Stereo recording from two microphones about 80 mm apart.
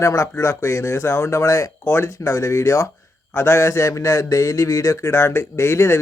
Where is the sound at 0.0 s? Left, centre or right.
Left.